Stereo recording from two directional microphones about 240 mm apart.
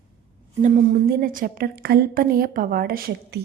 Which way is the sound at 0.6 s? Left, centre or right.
Right.